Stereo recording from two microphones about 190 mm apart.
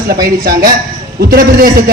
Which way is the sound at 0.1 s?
55° right (ahead or behind).